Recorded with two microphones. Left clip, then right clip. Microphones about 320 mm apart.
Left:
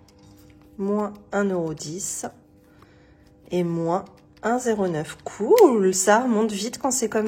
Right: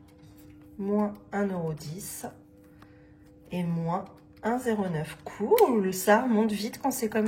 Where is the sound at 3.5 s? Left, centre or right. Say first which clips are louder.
Left 8 dB; centre.